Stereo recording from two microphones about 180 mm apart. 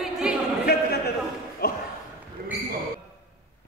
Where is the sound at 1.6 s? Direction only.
60° left (ahead or behind).